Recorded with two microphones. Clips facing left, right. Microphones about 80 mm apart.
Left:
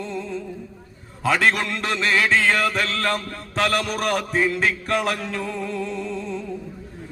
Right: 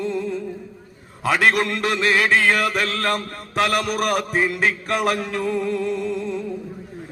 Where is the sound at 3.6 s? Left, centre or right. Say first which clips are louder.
Right 2 dB; centre.